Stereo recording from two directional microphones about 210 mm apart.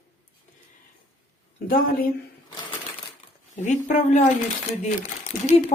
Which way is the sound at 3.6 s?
35° left (ahead or behind).